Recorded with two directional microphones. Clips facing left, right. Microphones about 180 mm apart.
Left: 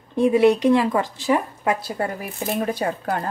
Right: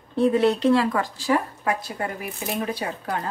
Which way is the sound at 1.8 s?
35° left (ahead or behind).